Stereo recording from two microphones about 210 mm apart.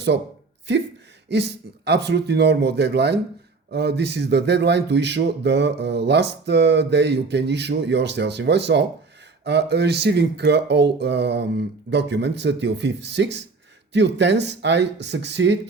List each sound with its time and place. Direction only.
1.3 s speech: 55° right (ahead or behind)